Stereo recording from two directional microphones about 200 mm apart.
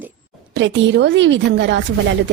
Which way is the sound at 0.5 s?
65° right (ahead or behind).